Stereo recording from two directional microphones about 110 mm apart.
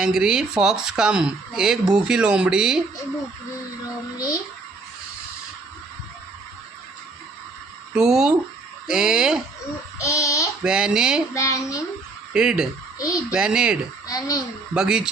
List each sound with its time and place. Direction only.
0.0 s speech: 5° right (ahead or behind)
7.9 s speech: 5° right (ahead or behind)
10.0 s child singing: 30° left (ahead or behind)
10.6 s speech: 10° right (ahead or behind)
11.3 s speech: 30° left (ahead or behind)
12.3 s speech: 5° right (ahead or behind)
13.0 s a child's voice: 30° left (ahead or behind)
13.3 s speech: 5° right (ahead or behind)
14.1 s a child's voice: 35° left (ahead or behind)
14.7 s speech: 5° right (ahead or behind)